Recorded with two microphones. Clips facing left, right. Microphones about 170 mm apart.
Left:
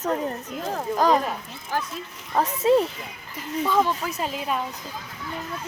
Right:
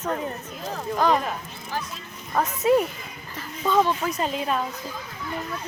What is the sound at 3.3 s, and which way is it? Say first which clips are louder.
Speech: even; 10° left (ahead or behind).